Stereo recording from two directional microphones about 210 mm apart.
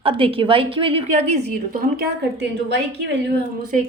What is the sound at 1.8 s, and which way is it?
Speech, 45° right (ahead or behind).